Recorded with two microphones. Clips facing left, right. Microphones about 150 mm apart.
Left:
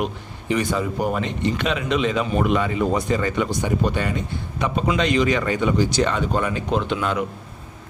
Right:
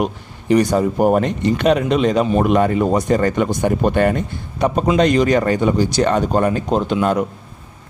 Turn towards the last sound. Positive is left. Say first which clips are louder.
# right 6 dB
turn(degrees=-45)  # may be behind; listen again after turning